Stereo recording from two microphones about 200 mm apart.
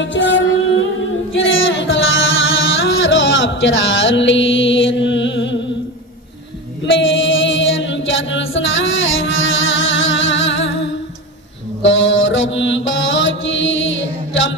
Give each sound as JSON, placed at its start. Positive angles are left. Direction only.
{"t": 0.0, "sound": "music", "side_deg": 65}
{"t": 6.9, "sound": "a capella", "side_deg": 70}
{"t": 11.8, "sound": "mantra", "side_deg": 70}